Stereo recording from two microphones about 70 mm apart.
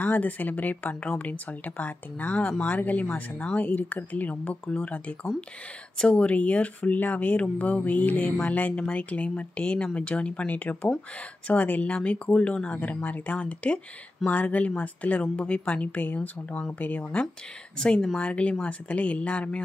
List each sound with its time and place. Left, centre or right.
0.0 s speech: left